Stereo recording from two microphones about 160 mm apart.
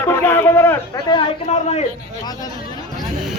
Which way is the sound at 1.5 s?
45° left (ahead or behind).